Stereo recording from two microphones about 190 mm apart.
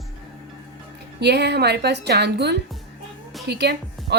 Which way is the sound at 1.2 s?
60° right (ahead or behind).